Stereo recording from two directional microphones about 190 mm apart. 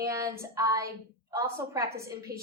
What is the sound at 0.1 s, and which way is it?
A woman's voice, 15° right (ahead or behind).